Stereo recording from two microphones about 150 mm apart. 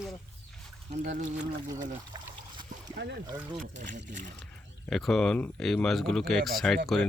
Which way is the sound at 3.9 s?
55° right (ahead or behind).